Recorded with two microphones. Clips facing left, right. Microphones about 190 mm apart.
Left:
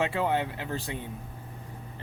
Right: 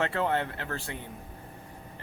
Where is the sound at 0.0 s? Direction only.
15° left (ahead or behind).